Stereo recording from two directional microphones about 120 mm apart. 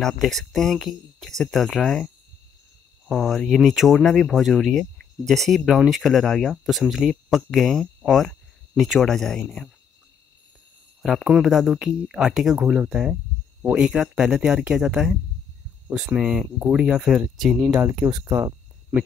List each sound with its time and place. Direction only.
0.0 s speech: centre (ahead or behind)
3.1 s speech: 5° left (ahead or behind)
11.0 s speech: centre (ahead or behind)
18.2 s a sound: 20° right (ahead or behind)